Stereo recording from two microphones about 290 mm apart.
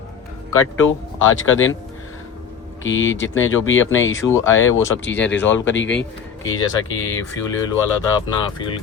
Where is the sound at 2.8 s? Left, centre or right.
Left.